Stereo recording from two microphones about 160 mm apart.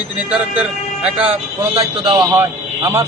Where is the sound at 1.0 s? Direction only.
5° right (ahead or behind).